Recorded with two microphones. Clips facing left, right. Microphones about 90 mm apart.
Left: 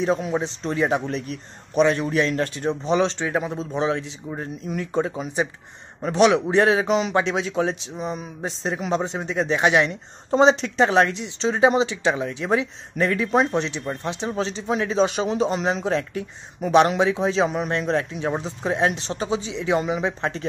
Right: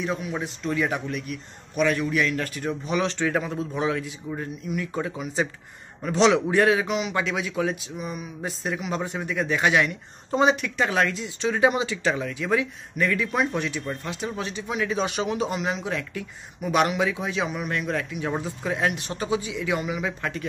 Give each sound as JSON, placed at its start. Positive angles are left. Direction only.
{"t": 0.0, "sound": "a man's voice", "side_deg": 30}
{"t": 6.1, "sound": "a man's voice", "side_deg": 15}